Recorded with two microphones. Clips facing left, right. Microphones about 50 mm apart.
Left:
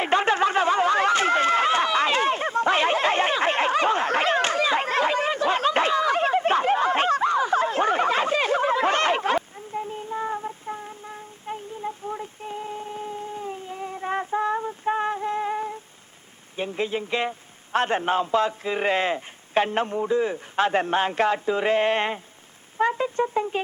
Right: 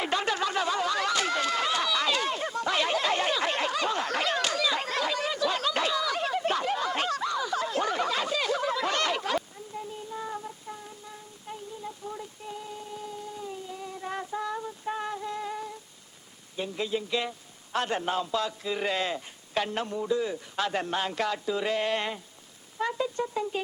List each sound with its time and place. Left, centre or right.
0.0 s chatter: left
16.6 s a man's voice: left